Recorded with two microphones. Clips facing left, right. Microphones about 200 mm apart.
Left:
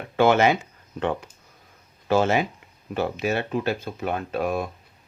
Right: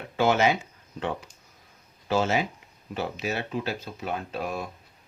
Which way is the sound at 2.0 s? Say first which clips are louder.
Left 4 dB; 55° left (ahead or behind).